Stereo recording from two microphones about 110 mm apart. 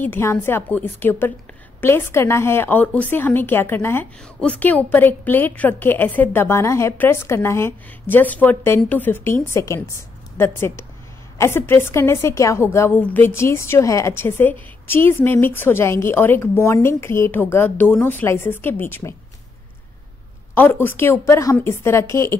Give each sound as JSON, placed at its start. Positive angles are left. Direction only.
{"t": 0.0, "sound": "a woman's voice", "side_deg": 20}
{"t": 20.5, "sound": "a woman's voice", "side_deg": 20}